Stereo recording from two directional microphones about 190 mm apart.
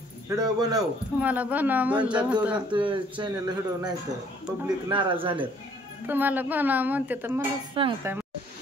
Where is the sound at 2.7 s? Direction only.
25° right (ahead or behind).